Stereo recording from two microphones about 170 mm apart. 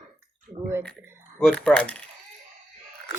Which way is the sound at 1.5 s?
5° left (ahead or behind).